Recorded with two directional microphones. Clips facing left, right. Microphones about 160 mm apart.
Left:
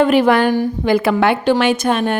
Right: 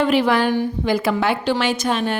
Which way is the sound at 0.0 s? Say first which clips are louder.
Left 5 dB; 50° left (ahead or behind).